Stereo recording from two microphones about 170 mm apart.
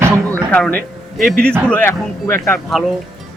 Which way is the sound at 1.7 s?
10° left (ahead or behind).